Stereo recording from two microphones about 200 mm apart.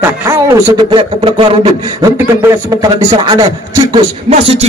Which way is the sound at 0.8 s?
25° right (ahead or behind).